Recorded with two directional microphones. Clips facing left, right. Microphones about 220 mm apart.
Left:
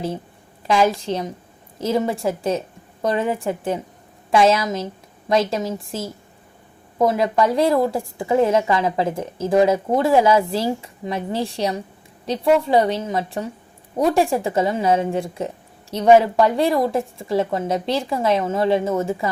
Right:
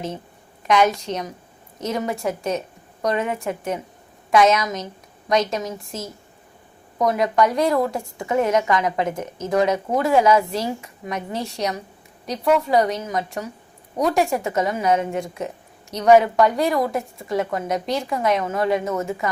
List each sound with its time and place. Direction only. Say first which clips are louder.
0.7 s a woman's voice: left 1 dB; 30° left (ahead or behind)
7.1 s a woman's voice: right 3 dB; 25° left (ahead or behind)